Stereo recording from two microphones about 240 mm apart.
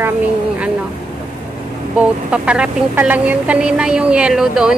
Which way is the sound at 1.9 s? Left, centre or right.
Centre.